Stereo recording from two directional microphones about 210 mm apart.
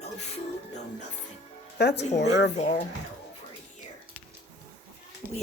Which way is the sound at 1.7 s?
50° left (ahead or behind).